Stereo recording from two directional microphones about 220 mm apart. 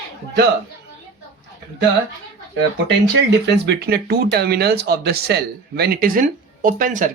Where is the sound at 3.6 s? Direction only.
45° right (ahead or behind).